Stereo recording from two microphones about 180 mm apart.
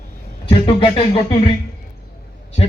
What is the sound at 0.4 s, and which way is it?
Speech, 30° left (ahead or behind).